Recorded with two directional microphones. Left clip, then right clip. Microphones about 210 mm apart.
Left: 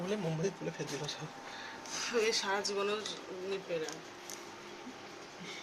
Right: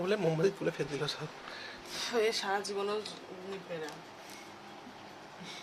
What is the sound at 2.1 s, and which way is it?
Speech, 25° right (ahead or behind).